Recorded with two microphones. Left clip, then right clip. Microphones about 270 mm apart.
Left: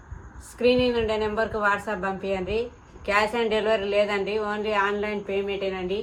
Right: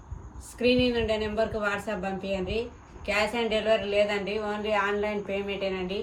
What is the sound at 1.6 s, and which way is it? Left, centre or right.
Speech, centre.